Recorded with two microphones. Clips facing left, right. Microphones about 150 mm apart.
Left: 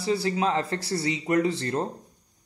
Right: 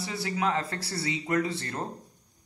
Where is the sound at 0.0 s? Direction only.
30° left (ahead or behind).